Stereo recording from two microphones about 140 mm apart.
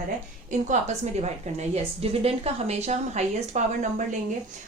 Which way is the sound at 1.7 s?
45° right (ahead or behind).